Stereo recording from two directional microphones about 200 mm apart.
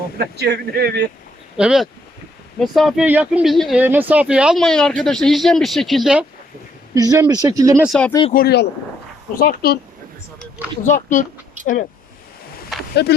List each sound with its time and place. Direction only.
0.2 s speech: 55° right (ahead or behind)
1.5 s speech: 5° right (ahead or behind)
6.9 s speech: 20° right (ahead or behind)
7.9 s speech: 5° left (ahead or behind)
8.3 s speech: 50° left (ahead or behind)
10.8 s speech: 40° left (ahead or behind)
12.9 s speech: 55° left (ahead or behind)